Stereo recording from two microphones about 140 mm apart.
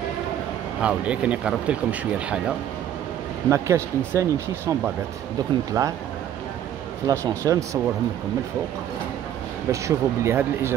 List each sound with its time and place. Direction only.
0.8 s speech: 10° right (ahead or behind)
3.4 s speech: 20° right (ahead or behind)
7.1 s speech: 25° right (ahead or behind)
9.7 s speech: 20° right (ahead or behind)